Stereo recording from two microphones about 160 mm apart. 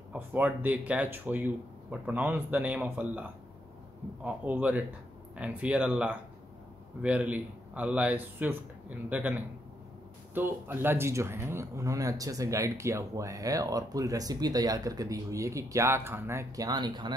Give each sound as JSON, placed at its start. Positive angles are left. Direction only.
{"t": 0.1, "sound": "speech", "side_deg": -10}